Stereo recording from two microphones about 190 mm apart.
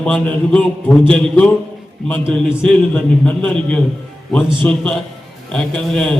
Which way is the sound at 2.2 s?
25° right (ahead or behind).